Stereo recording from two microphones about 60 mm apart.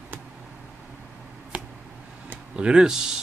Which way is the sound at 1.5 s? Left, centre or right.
Centre.